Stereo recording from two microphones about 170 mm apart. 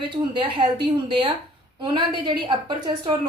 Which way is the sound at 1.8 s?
25° right (ahead or behind).